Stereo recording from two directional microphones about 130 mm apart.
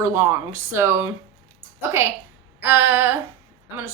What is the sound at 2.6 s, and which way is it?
Female singing, 15° right (ahead or behind).